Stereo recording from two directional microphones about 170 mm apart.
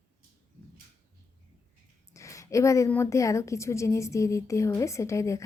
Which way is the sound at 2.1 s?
20° left (ahead or behind).